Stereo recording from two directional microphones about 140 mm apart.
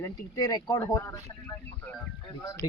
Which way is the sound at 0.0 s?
25° left (ahead or behind).